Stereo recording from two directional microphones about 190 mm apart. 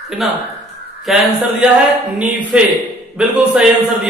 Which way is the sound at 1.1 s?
Centre (ahead or behind).